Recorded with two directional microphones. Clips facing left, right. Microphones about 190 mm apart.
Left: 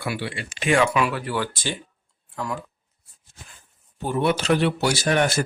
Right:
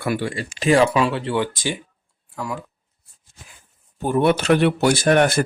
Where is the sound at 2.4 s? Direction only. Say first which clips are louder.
Right 1 dB; 5° right (ahead or behind).